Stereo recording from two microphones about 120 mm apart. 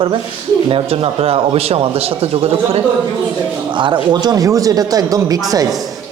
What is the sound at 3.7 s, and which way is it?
Speech, 40° right (ahead or behind).